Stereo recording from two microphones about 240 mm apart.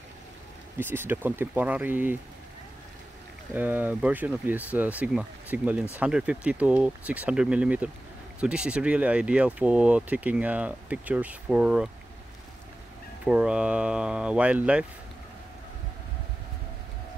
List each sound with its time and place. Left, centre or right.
0.7 s speech: centre
3.5 s speech: centre
13.2 s speech: centre